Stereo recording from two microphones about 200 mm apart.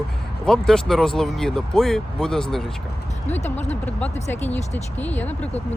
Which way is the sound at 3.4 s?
35° left (ahead or behind).